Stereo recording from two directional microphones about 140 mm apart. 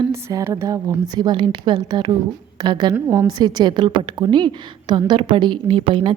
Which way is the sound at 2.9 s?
20° right (ahead or behind).